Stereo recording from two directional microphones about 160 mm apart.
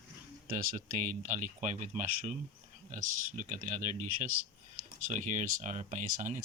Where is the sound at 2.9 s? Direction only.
50° right (ahead or behind).